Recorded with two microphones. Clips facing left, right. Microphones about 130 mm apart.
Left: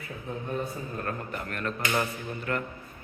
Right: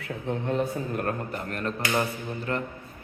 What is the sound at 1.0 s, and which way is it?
A man's voice, 40° right (ahead or behind).